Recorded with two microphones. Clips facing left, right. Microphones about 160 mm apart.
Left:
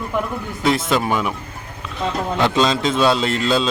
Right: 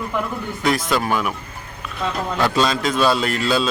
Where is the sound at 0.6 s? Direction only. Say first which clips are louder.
Left 2 dB; 25° left (ahead or behind).